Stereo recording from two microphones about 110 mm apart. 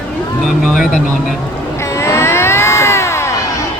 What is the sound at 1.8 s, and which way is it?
Cat, 25° left (ahead or behind).